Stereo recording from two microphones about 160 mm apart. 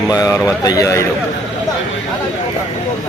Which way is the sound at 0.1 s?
20° left (ahead or behind).